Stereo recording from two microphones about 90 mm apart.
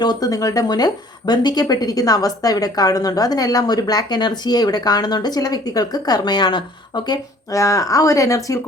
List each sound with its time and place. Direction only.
0.0 s speech: 55° left (ahead or behind)
0.3 s a woman's voice: 40° left (ahead or behind)
7.5 s speech: 35° left (ahead or behind)